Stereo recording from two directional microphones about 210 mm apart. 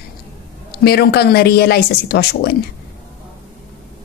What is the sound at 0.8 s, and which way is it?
A woman's voice, 50° left (ahead or behind).